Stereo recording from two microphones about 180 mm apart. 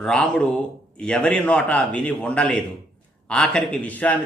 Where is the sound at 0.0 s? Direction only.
5° left (ahead or behind).